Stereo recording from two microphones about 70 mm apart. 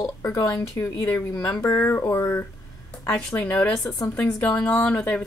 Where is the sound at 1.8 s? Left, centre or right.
Left.